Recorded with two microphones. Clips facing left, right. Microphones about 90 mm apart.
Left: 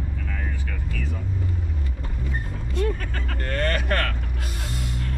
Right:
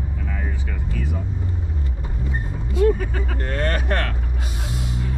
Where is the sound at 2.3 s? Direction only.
10° right (ahead or behind).